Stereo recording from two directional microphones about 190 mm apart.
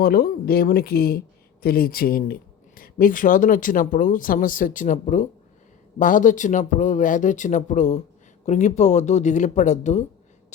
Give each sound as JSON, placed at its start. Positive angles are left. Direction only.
{"t": 0.0, "sound": "speech", "side_deg": 50}